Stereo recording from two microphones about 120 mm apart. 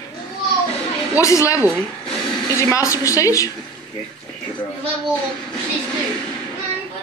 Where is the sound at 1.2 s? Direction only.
25° left (ahead or behind).